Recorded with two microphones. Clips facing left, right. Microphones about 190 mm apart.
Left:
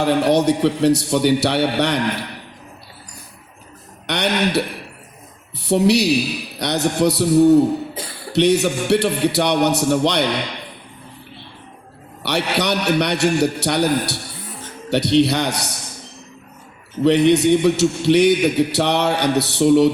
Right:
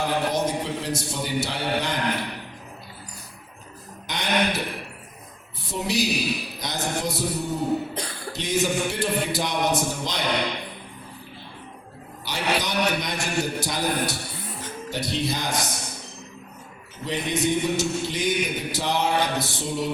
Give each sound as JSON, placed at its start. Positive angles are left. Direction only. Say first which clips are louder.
{"t": 0.0, "sound": "a man's voice", "louder": "left 8 dB", "side_deg": 70}
{"t": 4.0, "sound": "a man's voice", "louder": "left 5 dB", "side_deg": 70}
{"t": 8.0, "sound": "a sound", "louder": "left 1 dB", "side_deg": 5}
{"t": 8.3, "sound": "a man's voice", "louder": "left 9 dB", "side_deg": 70}
{"t": 12.2, "sound": "a man's voice", "louder": "left 6 dB", "side_deg": 70}
{"t": 17.0, "sound": "a man's voice", "louder": "left 13 dB", "side_deg": 70}